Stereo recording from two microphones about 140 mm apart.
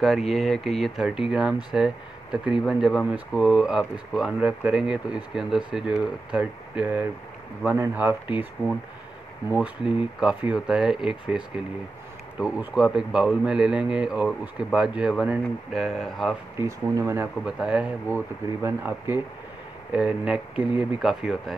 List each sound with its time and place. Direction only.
0.0 s a man's voice: centre (ahead or behind)
9.5 s a man's voice: 10° right (ahead or behind)
16.5 s speech: 20° right (ahead or behind)
17.5 s a man's voice: 5° right (ahead or behind)